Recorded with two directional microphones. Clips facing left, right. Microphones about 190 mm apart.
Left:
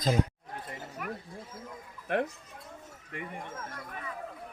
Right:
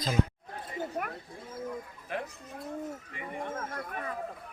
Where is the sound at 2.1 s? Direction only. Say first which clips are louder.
Left 7 dB; 60° left (ahead or behind).